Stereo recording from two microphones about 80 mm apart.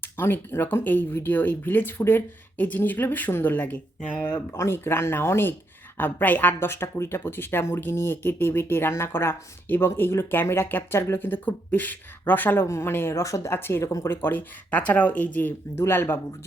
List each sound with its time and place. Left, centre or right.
0.0 s speech: left
4.5 s a woman's voice: left
12.6 s a woman's voice: left